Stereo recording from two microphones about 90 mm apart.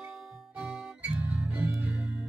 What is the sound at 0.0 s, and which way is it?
Music, 5° right (ahead or behind).